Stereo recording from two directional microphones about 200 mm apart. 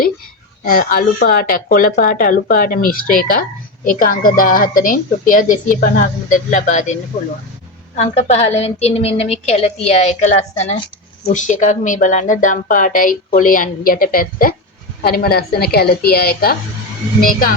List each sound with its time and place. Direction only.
0.6 s a woman's voice: 45° left (ahead or behind)
7.9 s a woman's voice: 35° left (ahead or behind)